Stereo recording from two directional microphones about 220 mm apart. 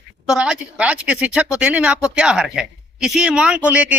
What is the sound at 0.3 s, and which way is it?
A woman's voice, 5° right (ahead or behind).